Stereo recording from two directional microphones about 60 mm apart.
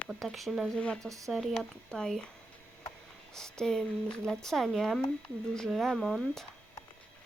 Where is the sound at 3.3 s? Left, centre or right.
Centre.